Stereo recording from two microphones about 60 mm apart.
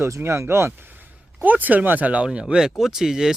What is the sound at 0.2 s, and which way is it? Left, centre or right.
Speech, right.